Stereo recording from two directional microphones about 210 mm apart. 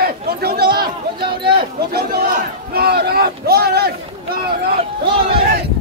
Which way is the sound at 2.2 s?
45° right (ahead or behind).